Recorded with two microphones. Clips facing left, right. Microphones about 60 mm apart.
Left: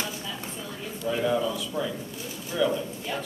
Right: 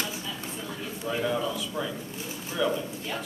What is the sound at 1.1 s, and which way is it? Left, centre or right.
A man's voice, centre.